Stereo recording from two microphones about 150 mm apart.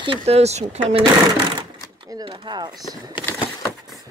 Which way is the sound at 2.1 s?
35° right (ahead or behind).